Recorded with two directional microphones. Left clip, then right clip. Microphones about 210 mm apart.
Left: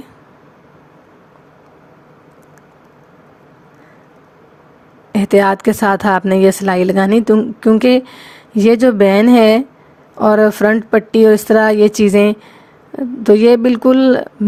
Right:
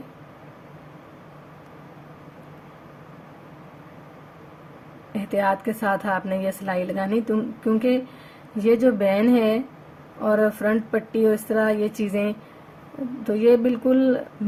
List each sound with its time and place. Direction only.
5.1 s a woman's voice: 50° left (ahead or behind)